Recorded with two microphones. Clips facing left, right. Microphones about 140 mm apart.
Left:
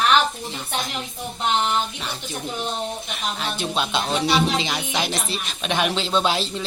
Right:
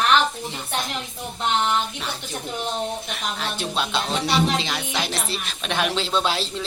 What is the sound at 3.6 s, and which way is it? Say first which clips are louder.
Speech: left 2 dB; centre (ahead or behind).